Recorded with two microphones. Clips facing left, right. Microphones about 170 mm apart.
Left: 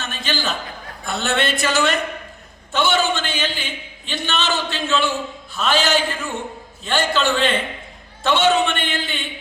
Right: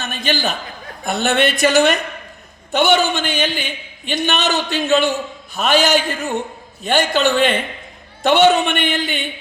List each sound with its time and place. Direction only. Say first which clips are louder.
0.0 s chuckle: right 4 dB; 15° right (ahead or behind)
1.2 s a man's voice: right 5 dB; 20° right (ahead or behind)